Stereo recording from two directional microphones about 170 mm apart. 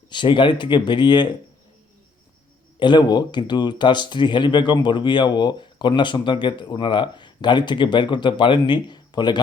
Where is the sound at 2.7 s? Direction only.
25° left (ahead or behind).